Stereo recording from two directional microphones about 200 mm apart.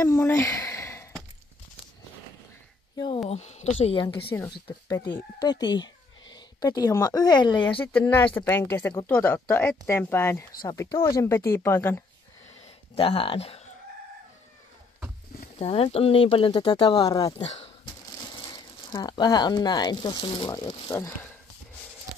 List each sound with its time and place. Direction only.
0.0 s speech: 15° left (ahead or behind)
3.3 s a woman's voice: 35° left (ahead or behind)
7.8 s speech: 10° left (ahead or behind)
12.9 s speech: 25° left (ahead or behind)
15.6 s speech: 30° left (ahead or behind)
17.4 s a woman's voice: 35° left (ahead or behind)
18.3 s speech: 20° left (ahead or behind)